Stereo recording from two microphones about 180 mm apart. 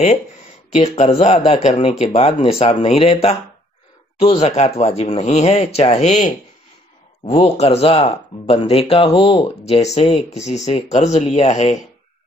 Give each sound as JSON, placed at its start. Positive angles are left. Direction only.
{"t": 0.7, "sound": "speech", "side_deg": 30}